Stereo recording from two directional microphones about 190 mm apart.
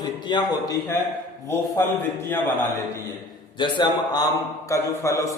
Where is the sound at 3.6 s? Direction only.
20° left (ahead or behind).